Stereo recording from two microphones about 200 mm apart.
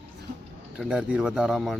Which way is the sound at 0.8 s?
5° right (ahead or behind).